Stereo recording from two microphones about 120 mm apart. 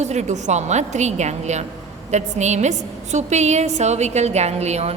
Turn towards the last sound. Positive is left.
turn(degrees=-65)  # may be behind; listen again after turning